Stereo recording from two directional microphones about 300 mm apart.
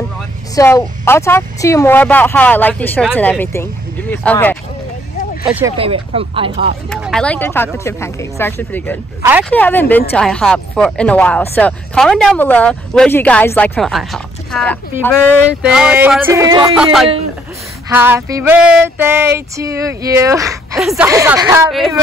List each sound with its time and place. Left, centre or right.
0.6 s a woman's voice: centre
5.8 s a sound: centre
6.9 s a woman's voice: centre
9.2 s speech: centre
9.5 s speech: centre
17.8 s a sound: centre